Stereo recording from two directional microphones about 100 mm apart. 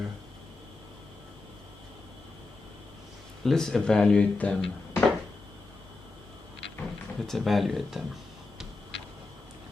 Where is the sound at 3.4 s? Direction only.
5° left (ahead or behind).